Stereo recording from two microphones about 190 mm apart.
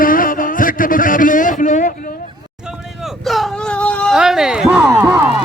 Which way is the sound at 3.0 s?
Centre (ahead or behind).